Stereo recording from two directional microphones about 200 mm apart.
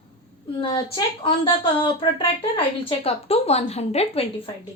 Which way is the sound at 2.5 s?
30° left (ahead or behind).